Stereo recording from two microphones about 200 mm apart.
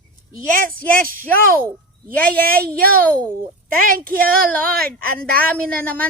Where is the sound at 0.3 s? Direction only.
45° right (ahead or behind).